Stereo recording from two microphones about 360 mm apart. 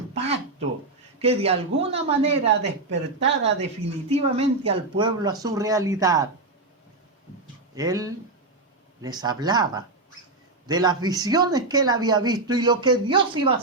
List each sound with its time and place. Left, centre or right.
0.1 s a sound: centre
1.2 s a woman's voice: centre
2.5 s speech: right
4.1 s a woman's voice: centre
7.8 s a woman's voice: centre